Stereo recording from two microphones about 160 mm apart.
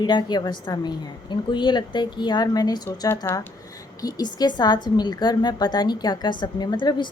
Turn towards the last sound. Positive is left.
turn(degrees=30)  # may be behind; listen again after turning